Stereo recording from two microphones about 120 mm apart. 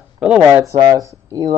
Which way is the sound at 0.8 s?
30° right (ahead or behind).